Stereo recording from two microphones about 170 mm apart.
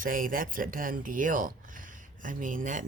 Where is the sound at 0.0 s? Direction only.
55° right (ahead or behind).